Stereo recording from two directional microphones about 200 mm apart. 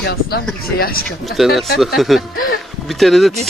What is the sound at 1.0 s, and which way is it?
Speech, centre (ahead or behind).